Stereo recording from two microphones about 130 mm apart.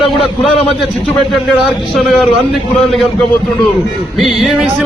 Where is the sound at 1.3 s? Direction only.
Centre (ahead or behind).